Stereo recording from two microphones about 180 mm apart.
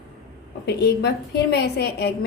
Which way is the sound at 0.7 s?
65° left (ahead or behind).